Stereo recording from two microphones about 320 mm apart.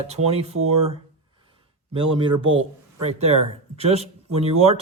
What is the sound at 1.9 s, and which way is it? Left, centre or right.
Speech, centre.